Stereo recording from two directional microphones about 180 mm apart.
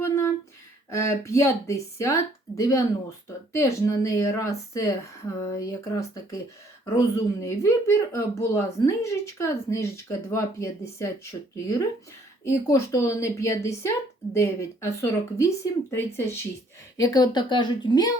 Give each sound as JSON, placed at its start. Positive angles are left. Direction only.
{"t": 0.9, "sound": "speech", "side_deg": 15}